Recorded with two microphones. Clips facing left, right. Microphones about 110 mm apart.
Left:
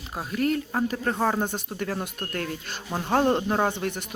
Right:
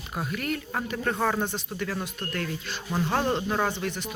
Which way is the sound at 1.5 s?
45° left (ahead or behind).